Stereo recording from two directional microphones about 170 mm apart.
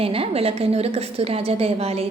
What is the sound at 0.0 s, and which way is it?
A woman's voice, 35° right (ahead or behind).